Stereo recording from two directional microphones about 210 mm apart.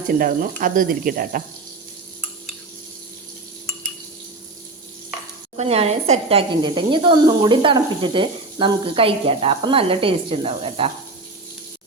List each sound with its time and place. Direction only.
0.1 s speech: 40° right (ahead or behind)
5.5 s speech: 30° right (ahead or behind)